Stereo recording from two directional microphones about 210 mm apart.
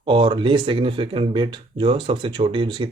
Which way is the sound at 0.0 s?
25° right (ahead or behind).